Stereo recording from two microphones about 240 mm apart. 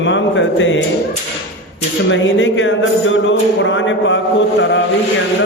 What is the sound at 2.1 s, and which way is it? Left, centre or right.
A man's voice, left.